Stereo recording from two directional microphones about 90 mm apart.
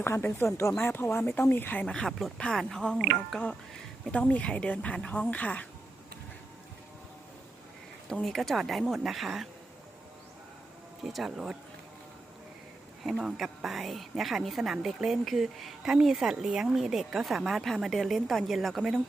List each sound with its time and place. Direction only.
0.0 s speech: 25° left (ahead or behind)
1.8 s a woman's voice: 10° left (ahead or behind)
8.1 s a woman's voice: 5° left (ahead or behind)
11.0 s a woman's voice: 5° right (ahead or behind)
13.1 s a woman's voice: centre (ahead or behind)